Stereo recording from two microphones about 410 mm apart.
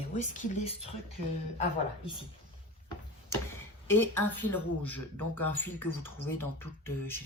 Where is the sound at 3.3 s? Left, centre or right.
Centre.